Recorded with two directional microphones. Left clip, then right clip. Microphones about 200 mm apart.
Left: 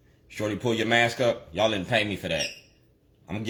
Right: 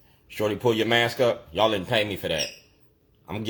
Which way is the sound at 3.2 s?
20° right (ahead or behind).